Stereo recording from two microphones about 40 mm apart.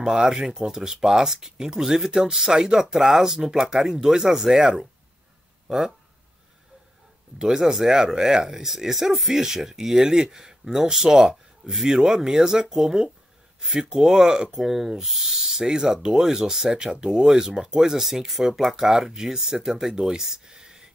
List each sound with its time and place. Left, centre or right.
0.0 s speech: centre
7.3 s speech: centre